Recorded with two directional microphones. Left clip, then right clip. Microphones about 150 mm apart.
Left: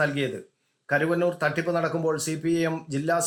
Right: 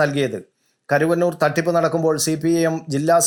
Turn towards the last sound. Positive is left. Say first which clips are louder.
# right 9 dB
turn(degrees=-30)  # may be behind; listen again after turning